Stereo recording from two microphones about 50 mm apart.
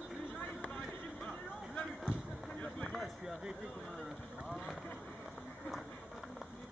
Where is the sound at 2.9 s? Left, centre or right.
Centre.